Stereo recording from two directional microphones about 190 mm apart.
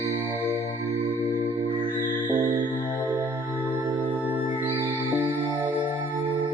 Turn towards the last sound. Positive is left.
turn(degrees=-10)  # may be behind; listen again after turning